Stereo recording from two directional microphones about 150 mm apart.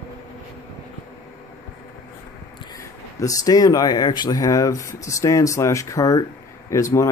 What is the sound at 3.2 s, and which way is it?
Speech, 25° left (ahead or behind).